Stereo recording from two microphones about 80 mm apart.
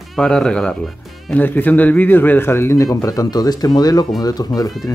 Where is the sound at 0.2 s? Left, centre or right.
Centre.